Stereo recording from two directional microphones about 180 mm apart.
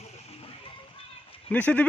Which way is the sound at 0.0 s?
35° left (ahead or behind).